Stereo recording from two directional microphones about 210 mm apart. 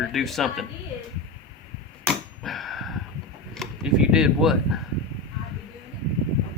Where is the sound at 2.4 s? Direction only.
Centre (ahead or behind).